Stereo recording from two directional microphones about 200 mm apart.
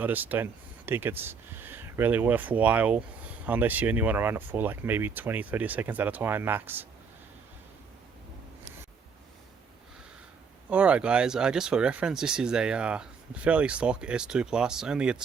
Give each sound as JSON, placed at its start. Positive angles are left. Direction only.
{"t": 0.0, "sound": "speech", "side_deg": -10}
{"t": 10.7, "sound": "speech", "side_deg": -5}